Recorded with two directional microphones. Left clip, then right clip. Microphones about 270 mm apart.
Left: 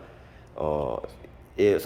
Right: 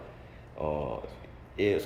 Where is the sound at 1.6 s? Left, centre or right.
Centre.